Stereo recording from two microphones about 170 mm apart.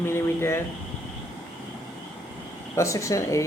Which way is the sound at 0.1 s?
15° left (ahead or behind).